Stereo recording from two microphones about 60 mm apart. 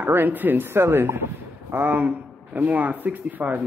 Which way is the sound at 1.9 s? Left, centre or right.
Right.